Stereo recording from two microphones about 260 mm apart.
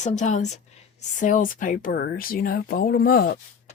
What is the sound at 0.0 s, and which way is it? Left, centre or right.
A woman's voice, left.